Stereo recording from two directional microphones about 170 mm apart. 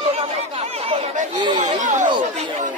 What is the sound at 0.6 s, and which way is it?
Speech, 35° right (ahead or behind).